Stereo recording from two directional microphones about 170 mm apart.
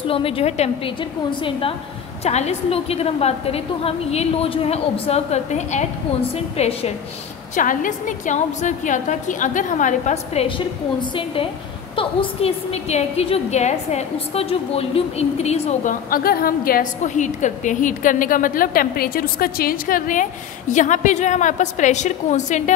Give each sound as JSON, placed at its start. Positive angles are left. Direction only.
{"t": 0.0, "sound": "a woman's voice", "side_deg": 30}
{"t": 7.5, "sound": "a woman's voice", "side_deg": 50}